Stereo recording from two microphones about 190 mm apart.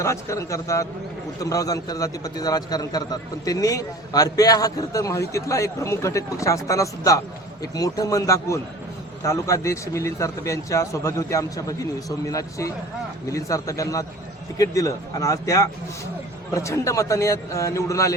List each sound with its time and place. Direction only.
0.0 s a man's voice: 15° left (ahead or behind)